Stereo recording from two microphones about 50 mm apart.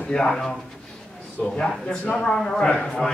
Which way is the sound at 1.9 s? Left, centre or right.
Centre.